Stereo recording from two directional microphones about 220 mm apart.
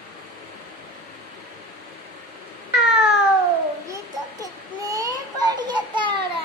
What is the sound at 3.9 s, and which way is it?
Children playing, 15° right (ahead or behind).